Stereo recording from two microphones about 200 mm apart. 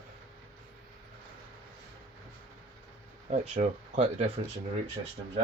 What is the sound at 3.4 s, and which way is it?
Speech, 35° right (ahead or behind).